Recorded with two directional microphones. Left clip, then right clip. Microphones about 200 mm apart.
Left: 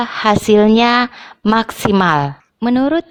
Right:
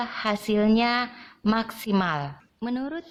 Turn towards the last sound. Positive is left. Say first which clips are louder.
# left 16 dB
turn(degrees=45)  # may be behind; listen again after turning